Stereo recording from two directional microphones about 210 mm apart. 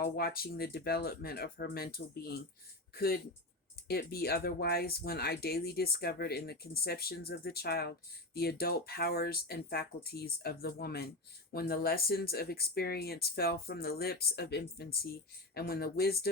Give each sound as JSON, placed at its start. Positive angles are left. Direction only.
{"t": 0.0, "sound": "speech", "side_deg": 45}